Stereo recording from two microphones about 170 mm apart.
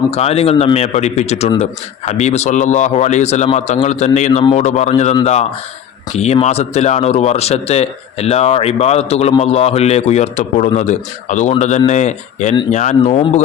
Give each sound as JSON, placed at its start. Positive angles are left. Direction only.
{"t": 0.1, "sound": "speech", "side_deg": 35}